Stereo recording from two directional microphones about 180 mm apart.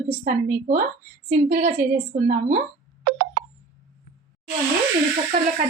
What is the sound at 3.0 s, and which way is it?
Clock, 80° right.